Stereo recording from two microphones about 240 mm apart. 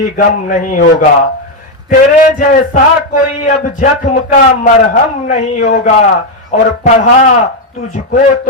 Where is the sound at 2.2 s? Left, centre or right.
Left.